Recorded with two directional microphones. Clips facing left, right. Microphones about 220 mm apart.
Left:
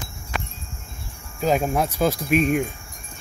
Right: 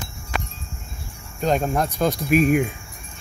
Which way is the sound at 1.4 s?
Centre (ahead or behind).